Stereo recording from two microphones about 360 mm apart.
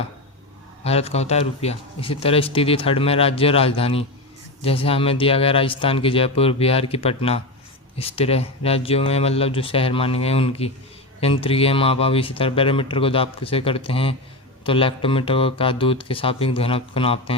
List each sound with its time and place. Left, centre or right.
0.9 s speech: centre